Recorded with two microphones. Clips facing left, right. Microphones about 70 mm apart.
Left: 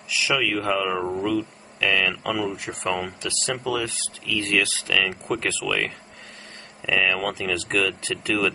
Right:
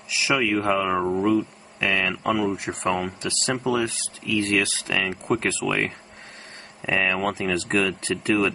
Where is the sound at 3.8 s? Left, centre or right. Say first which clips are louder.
Right 3 dB; right.